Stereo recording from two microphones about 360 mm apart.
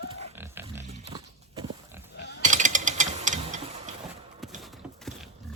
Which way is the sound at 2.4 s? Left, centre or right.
Right.